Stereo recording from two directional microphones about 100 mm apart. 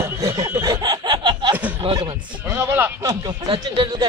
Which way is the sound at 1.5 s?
15° right (ahead or behind).